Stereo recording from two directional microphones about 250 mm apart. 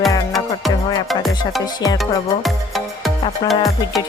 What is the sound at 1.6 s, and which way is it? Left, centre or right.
Speech, centre.